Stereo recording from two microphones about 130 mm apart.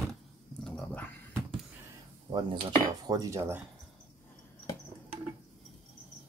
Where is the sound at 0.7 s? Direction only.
10° left (ahead or behind).